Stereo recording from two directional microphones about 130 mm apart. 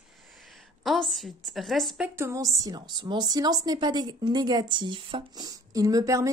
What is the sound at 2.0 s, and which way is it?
A woman's voice, 20° right (ahead or behind).